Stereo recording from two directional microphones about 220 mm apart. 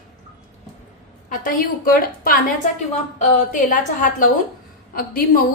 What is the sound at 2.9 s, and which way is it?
A woman's voice, 35° left (ahead or behind).